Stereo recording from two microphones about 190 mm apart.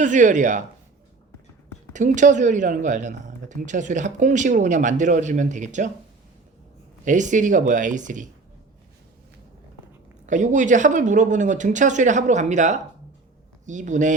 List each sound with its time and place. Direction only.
0.0 s speech: 40° right (ahead or behind)
1.9 s speech: 40° right (ahead or behind)
7.0 s speech: 40° right (ahead or behind)
10.2 s speech: 40° right (ahead or behind)